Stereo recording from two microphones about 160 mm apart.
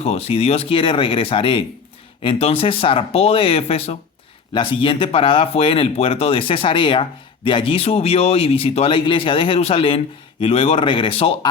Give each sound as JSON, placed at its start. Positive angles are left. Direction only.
{"t": 0.0, "sound": "speech", "side_deg": 40}